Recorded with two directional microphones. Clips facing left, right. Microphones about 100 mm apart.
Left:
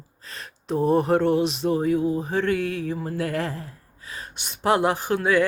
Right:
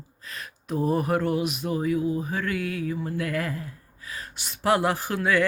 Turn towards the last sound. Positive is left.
turn(degrees=20)  # may be behind; listen again after turning